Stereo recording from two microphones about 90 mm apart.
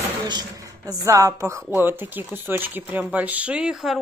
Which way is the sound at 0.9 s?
40° right (ahead or behind).